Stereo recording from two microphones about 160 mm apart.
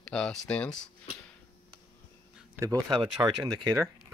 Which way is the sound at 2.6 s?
25° right (ahead or behind).